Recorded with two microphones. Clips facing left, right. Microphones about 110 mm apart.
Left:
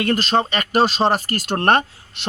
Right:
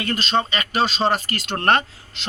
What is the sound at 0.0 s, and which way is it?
A man's voice, 50° left (ahead or behind).